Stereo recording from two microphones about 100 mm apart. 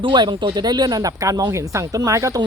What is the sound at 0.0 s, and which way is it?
Speech, 50° right (ahead or behind).